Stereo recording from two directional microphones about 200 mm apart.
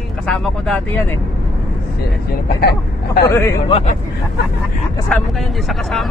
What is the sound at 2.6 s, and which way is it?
Speech, 50° left (ahead or behind).